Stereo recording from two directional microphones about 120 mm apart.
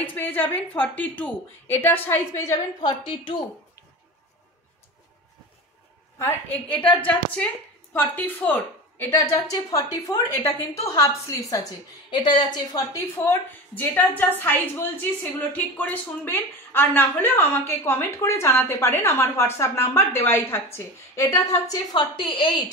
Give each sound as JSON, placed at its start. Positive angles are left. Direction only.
{"t": 0.0, "sound": "a woman's voice", "side_deg": 15}
{"t": 2.8, "sound": "a woman's voice", "side_deg": 40}
{"t": 6.5, "sound": "a woman's voice", "side_deg": 45}
{"t": 7.9, "sound": "a woman's voice", "side_deg": 15}
{"t": 9.5, "sound": "a woman's voice", "side_deg": 30}
{"t": 13.1, "sound": "a woman's voice", "side_deg": 20}
{"t": 22.1, "sound": "a woman's voice", "side_deg": 45}